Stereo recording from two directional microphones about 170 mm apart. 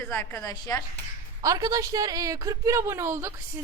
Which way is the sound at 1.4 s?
20° right (ahead or behind).